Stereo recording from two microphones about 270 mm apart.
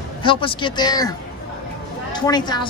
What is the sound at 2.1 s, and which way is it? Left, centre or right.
Speech, centre.